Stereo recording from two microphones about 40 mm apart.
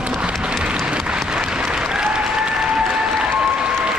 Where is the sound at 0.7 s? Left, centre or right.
Right.